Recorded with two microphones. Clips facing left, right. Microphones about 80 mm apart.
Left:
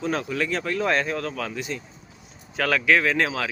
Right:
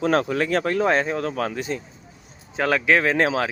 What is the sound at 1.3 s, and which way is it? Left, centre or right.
Speech, right.